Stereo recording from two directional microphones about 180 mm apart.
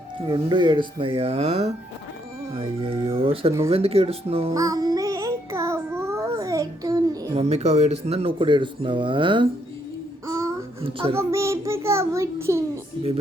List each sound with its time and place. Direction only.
0.3 s speech: 25° right (ahead or behind)
4.5 s music: 20° right (ahead or behind)
7.3 s speech: 35° right (ahead or behind)
10.2 s babbling: 20° right (ahead or behind)
11.1 s child singing: 15° right (ahead or behind)